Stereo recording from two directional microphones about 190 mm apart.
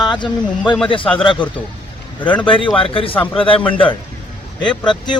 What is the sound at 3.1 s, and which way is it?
Speech, 10° left (ahead or behind).